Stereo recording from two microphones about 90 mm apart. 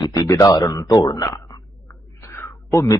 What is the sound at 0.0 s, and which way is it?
Speech, 40° left (ahead or behind).